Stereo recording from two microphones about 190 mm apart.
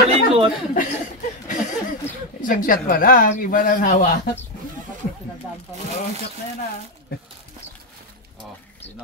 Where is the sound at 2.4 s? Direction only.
45° left (ahead or behind).